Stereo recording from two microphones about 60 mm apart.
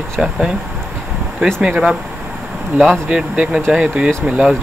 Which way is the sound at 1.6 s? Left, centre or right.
Centre.